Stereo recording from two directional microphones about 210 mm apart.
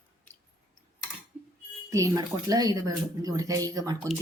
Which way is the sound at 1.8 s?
15° right (ahead or behind).